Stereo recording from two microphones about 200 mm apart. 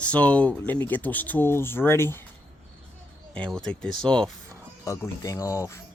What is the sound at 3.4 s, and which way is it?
Speech, 5° left (ahead or behind).